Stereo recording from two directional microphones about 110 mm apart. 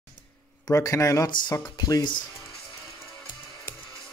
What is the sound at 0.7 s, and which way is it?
Speech, 25° left (ahead or behind).